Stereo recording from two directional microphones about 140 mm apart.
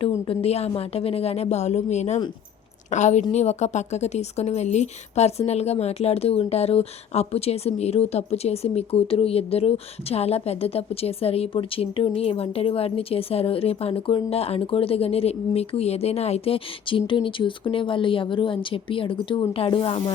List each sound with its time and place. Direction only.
0.3 s a woman's voice: 45° left (ahead or behind)